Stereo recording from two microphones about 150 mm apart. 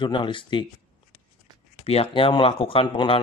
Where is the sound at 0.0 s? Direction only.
35° left (ahead or behind).